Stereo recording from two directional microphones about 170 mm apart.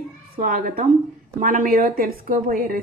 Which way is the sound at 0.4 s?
50° right (ahead or behind).